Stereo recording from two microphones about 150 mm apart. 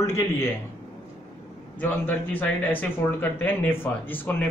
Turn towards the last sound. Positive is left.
turn(degrees=15)  # may be behind; listen again after turning